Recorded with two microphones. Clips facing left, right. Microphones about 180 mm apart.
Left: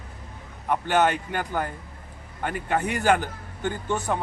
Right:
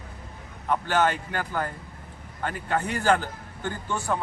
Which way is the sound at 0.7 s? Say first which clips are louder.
Left 2 dB; 15° left (ahead or behind).